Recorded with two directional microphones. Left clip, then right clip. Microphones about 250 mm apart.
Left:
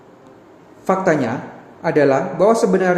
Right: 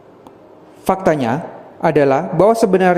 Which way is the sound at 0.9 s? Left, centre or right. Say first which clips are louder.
Right 2 dB; right.